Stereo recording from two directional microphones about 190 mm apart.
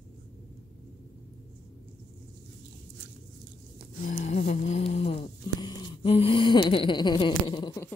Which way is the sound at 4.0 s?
40° left (ahead or behind).